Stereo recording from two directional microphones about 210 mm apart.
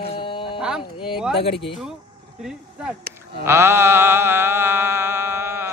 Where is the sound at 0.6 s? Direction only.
5° right (ahead or behind).